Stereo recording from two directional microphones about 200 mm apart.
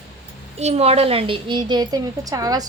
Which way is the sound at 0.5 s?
35° right (ahead or behind).